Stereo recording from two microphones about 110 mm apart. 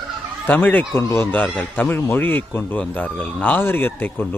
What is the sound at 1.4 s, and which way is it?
Speech, 10° left (ahead or behind).